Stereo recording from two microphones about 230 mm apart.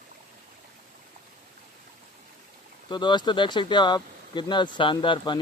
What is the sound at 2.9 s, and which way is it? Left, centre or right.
Speech, centre.